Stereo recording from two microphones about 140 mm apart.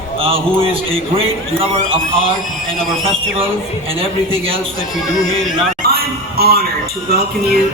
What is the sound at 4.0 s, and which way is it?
Speech, 40° right (ahead or behind).